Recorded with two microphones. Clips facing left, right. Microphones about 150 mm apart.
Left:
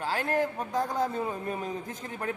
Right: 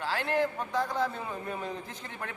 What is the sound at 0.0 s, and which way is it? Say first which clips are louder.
A man's voice: left 1 dB; 45° left (ahead or behind).